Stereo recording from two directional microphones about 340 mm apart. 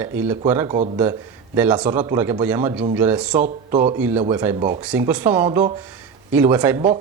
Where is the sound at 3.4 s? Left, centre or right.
Centre.